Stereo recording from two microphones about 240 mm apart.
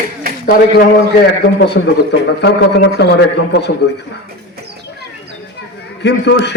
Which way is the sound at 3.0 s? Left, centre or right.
Left.